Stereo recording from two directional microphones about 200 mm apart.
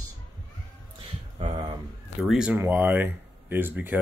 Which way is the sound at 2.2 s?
5° right (ahead or behind).